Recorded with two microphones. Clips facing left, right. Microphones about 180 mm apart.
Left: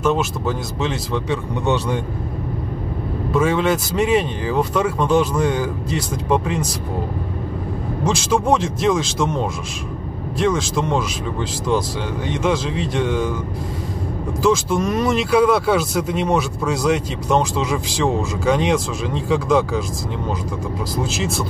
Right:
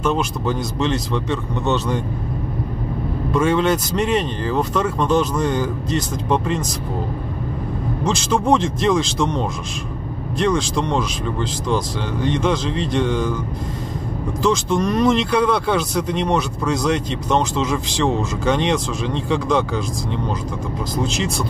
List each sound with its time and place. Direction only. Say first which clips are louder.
0.0 s speech: left 1 dB; 5° left (ahead or behind)
3.3 s speech: even; 5° left (ahead or behind)
8.0 s speech: left 1 dB; 10° left (ahead or behind)
14.4 s speech: left 1 dB; 5° left (ahead or behind)
20.9 s speech: right 1 dB; 5° left (ahead or behind)